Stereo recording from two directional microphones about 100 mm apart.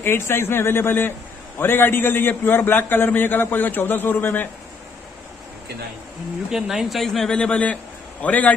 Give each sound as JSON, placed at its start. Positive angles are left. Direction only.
{"t": 0.0, "sound": "a man's voice", "side_deg": 25}
{"t": 6.5, "sound": "a man's voice", "side_deg": -5}